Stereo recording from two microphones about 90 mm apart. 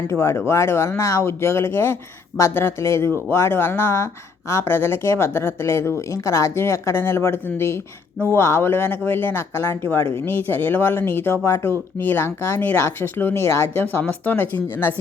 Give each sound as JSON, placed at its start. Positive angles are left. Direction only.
{"t": 0.1, "sound": "speech", "side_deg": 30}